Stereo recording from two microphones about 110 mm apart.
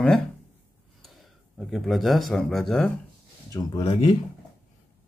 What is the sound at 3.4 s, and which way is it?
Speech, 35° left (ahead or behind).